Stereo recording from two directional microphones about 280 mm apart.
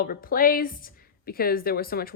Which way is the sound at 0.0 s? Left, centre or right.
Left.